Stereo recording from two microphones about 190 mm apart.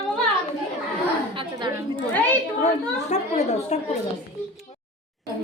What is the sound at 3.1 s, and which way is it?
Speech, 35° left (ahead or behind).